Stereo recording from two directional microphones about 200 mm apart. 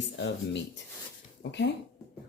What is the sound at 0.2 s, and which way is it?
Speech, 60° left (ahead or behind).